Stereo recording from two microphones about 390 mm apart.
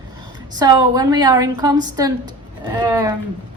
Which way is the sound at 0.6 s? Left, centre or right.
Centre.